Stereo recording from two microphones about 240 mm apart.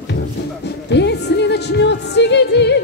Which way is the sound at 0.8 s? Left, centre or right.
Left.